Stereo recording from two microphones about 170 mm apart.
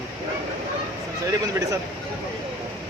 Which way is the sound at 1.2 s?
20° right (ahead or behind).